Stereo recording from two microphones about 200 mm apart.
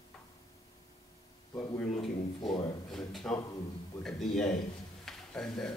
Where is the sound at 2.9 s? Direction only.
Centre (ahead or behind).